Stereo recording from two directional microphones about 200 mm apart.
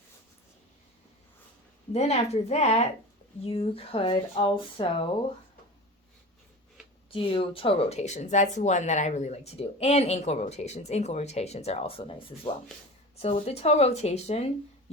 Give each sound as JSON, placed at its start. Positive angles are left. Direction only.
{"t": 1.9, "sound": "speech", "side_deg": 35}
{"t": 7.1, "sound": "speech", "side_deg": 25}
{"t": 13.2, "sound": "speech", "side_deg": 30}